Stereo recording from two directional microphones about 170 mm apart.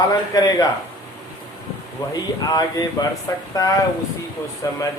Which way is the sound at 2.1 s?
25° left (ahead or behind).